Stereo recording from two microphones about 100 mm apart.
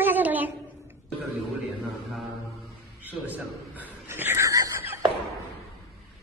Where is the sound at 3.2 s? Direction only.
15° right (ahead or behind); by 4.7 s 35° right (ahead or behind).